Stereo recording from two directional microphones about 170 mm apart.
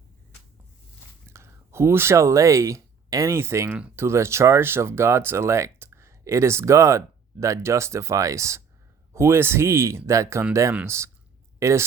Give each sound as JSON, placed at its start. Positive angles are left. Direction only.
{"t": 1.3, "sound": "speech", "side_deg": -15}